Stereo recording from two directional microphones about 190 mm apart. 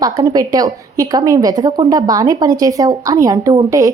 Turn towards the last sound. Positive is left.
turn(degrees=-15)  # may be behind; listen again after turning